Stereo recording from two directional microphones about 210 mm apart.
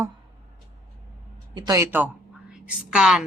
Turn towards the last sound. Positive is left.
turn(degrees=-5)  # may be behind; listen again after turning